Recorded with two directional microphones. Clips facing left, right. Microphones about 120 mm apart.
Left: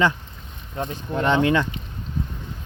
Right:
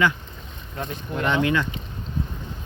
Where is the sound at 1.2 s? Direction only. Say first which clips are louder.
Left 3 dB; 30° left (ahead or behind).